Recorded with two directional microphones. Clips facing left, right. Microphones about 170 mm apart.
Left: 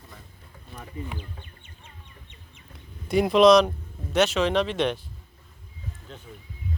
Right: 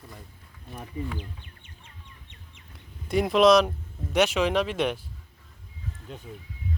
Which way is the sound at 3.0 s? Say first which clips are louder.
Left 2 dB; centre (ahead or behind).